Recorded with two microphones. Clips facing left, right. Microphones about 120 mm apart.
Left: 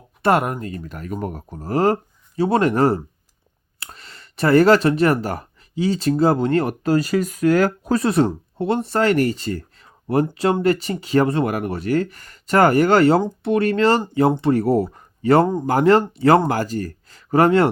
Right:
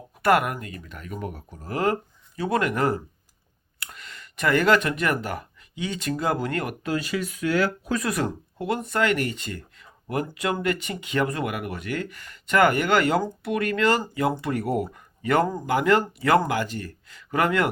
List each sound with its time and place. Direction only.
0.2 s speech: 30° left (ahead or behind)